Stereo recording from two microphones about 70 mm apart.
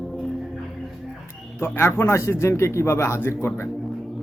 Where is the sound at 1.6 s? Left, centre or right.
Left.